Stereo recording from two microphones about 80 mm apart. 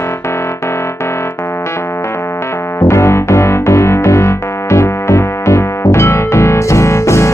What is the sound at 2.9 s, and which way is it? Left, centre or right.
Music, left.